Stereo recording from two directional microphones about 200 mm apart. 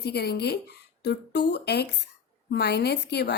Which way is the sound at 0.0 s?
55° left (ahead or behind).